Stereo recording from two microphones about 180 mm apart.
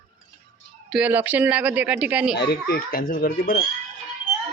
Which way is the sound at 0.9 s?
5° right (ahead or behind).